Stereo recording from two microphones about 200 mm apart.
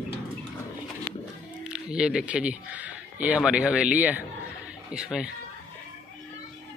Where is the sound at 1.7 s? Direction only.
5° right (ahead or behind).